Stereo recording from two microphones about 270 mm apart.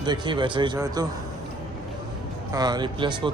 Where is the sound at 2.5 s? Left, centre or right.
Centre.